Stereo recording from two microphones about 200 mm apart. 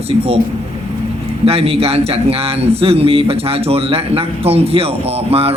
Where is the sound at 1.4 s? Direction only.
30° right (ahead or behind).